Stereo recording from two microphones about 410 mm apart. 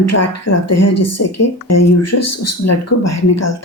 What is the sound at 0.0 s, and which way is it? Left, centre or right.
A woman's voice, left.